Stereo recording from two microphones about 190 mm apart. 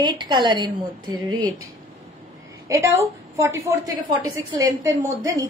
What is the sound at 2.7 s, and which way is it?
A woman's voice, 15° right (ahead or behind).